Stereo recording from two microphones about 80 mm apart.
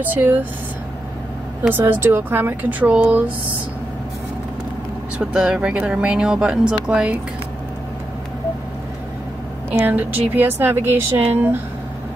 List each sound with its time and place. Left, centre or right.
0.0 s a woman's voice: right
1.7 s a woman's voice: right
5.2 s speech: centre
9.7 s a woman's voice: right